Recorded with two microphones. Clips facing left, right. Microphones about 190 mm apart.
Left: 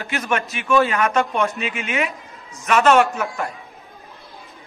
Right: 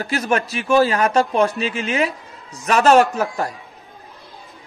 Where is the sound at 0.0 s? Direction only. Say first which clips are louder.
Right 3 dB; 35° right (ahead or behind).